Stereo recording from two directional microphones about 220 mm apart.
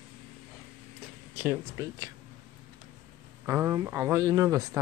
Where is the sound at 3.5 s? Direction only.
15° right (ahead or behind).